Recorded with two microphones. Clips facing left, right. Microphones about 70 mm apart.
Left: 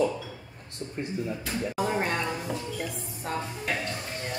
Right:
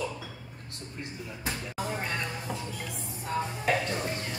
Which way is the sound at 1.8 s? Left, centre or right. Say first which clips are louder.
Left 6 dB; left.